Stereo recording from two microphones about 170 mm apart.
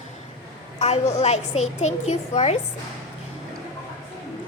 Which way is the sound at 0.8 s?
40° left (ahead or behind).